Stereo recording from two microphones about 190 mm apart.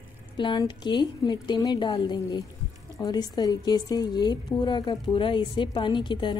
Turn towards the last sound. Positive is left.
turn(degrees=25)  # may be behind; listen again after turning